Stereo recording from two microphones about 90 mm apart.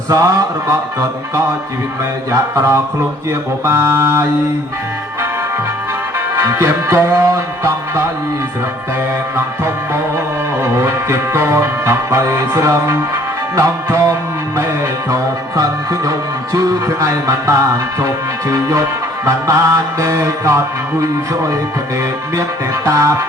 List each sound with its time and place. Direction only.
0.1 s music: 40° right (ahead or behind)
2.3 s music: 35° right (ahead or behind)
6.3 s music: 35° right (ahead or behind)
10.6 s music: 30° right (ahead or behind)
22.9 s music: 35° right (ahead or behind)